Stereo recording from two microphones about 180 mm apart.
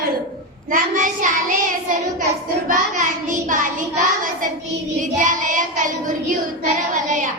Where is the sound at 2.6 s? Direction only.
45° right (ahead or behind).